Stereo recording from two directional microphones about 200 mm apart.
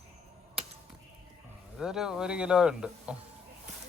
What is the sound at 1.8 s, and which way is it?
Speech, 5° right (ahead or behind).